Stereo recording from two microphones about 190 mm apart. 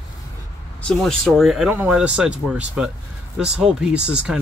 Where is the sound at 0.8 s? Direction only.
Centre (ahead or behind).